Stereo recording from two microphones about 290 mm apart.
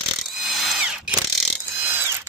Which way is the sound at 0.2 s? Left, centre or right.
Centre.